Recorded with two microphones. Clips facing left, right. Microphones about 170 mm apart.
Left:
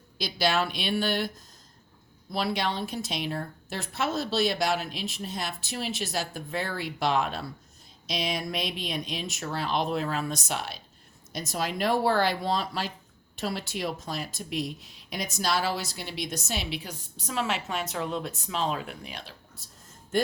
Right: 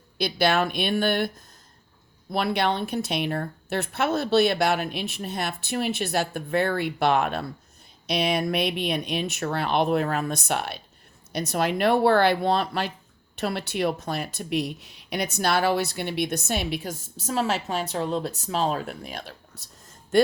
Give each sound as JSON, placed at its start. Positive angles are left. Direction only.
{"t": 0.2, "sound": "speech", "side_deg": -60}
{"t": 2.3, "sound": "speech", "side_deg": -60}
{"t": 19.5, "sound": "a sound", "side_deg": -75}